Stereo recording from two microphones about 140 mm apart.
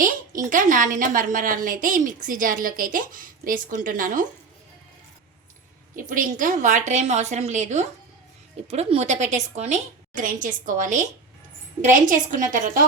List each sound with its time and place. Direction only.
0.0 s a woman's voice: 70° right (ahead or behind)
6.0 s a woman's voice: 75° right (ahead or behind)